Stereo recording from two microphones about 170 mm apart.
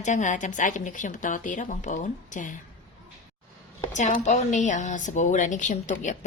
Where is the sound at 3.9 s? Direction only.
45° left (ahead or behind).